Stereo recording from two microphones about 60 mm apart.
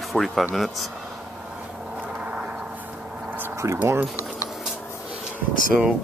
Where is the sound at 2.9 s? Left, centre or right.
Centre.